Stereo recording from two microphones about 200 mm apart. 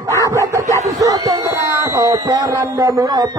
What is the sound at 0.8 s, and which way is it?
A man's voice, 15° right (ahead or behind).